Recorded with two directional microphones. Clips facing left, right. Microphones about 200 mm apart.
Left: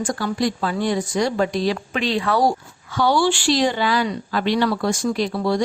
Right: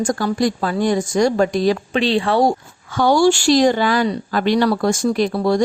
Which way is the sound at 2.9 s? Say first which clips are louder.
Right 4 dB; 45° right (ahead or behind).